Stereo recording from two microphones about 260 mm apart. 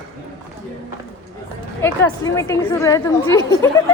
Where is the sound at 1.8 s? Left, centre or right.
Centre.